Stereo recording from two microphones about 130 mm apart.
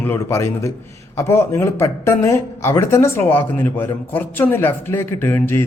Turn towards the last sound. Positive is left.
turn(degrees=20)  # may be behind; listen again after turning